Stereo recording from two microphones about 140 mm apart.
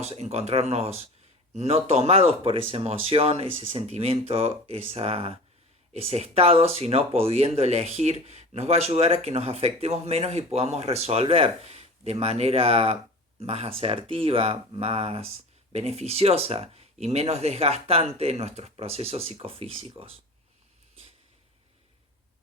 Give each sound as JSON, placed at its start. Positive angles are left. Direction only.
{"t": 0.0, "sound": "speech", "side_deg": -50}